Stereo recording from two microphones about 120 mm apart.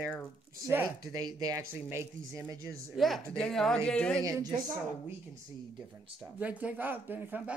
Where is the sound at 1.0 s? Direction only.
30° right (ahead or behind).